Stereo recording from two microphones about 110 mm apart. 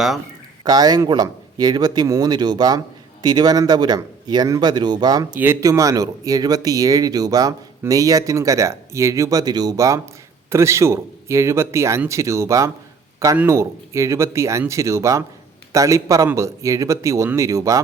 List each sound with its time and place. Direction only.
0.6 s speech: 35° right (ahead or behind)
5.4 s speech: 25° right (ahead or behind)